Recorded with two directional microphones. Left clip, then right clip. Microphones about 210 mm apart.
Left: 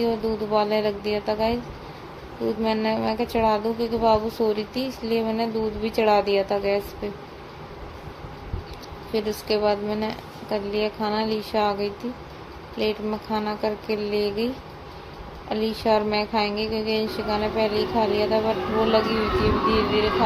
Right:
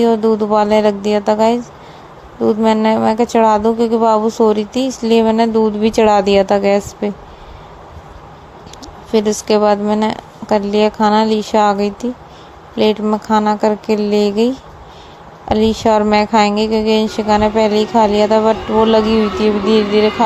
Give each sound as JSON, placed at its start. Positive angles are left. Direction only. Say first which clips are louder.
{"t": 0.0, "sound": "speech", "louder": "right 12 dB", "side_deg": -40}
{"t": 9.1, "sound": "speech", "louder": "right 11 dB", "side_deg": -40}